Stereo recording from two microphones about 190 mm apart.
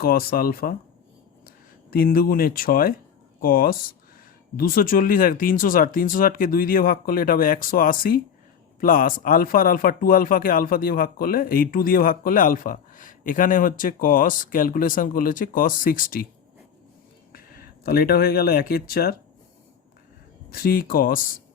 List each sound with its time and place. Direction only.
0.0 s speech: 50° left (ahead or behind)
1.9 s speech: 50° left (ahead or behind)
17.3 s speech: 50° left (ahead or behind)
20.5 s speech: 50° left (ahead or behind)